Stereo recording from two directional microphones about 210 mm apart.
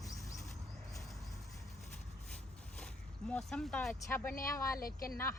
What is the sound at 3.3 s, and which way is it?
Speech, 5° left (ahead or behind).